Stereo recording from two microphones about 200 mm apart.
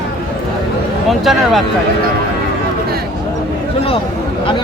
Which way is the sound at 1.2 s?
Centre (ahead or behind).